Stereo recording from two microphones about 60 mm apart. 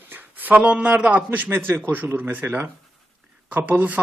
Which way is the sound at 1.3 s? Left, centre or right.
Right.